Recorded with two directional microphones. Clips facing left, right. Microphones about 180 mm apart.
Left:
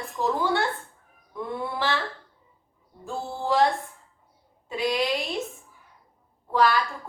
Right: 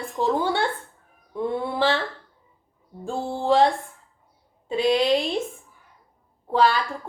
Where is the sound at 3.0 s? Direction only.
30° right (ahead or behind).